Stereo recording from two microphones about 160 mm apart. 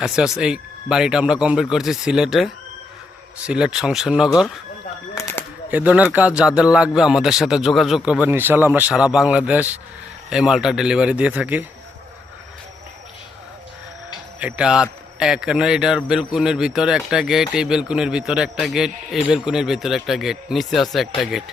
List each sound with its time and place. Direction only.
0.0 s speech: 5° right (ahead or behind)
5.1 s a sound: 15° left (ahead or behind)
5.7 s speech: 10° right (ahead or behind)
14.3 s speech: 5° right (ahead or behind)